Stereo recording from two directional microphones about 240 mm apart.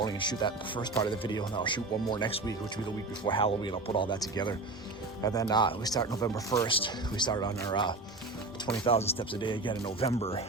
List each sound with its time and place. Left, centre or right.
0.0 s speech: centre